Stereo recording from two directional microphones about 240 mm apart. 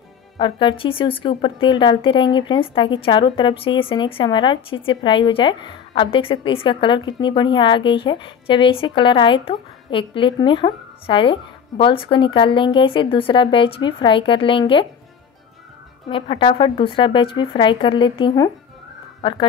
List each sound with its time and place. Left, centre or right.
0.4 s speech: centre
16.1 s speech: left